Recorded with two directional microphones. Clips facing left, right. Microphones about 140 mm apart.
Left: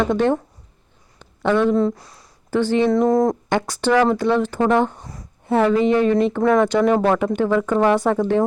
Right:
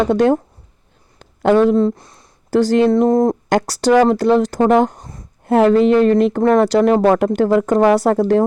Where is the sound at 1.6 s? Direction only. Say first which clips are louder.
Right 4 dB; 25° right (ahead or behind).